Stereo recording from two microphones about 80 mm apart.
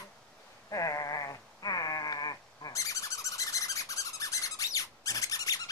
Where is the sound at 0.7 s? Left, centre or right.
Left.